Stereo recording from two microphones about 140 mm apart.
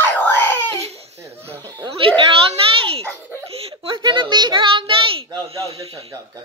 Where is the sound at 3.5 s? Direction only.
45° right (ahead or behind).